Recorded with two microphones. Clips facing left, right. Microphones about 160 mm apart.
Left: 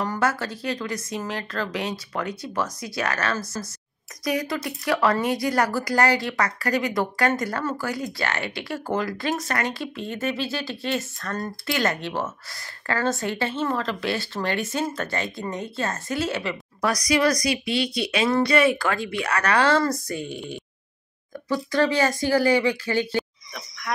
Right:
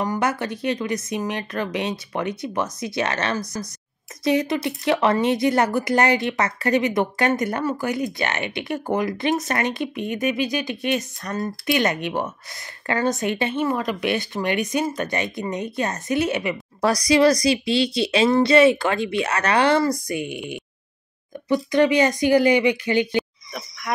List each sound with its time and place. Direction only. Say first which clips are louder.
0.0 s speech: right 2 dB; 15° right (ahead or behind)
16.8 s speech: right 5 dB; 30° right (ahead or behind)